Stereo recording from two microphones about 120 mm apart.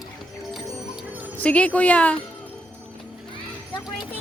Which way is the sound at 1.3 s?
10° left (ahead or behind).